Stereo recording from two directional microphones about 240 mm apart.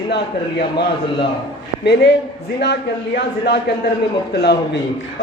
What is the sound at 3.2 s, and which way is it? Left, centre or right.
Speech, left.